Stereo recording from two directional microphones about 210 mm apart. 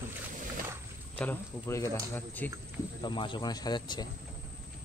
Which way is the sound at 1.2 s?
10° left (ahead or behind).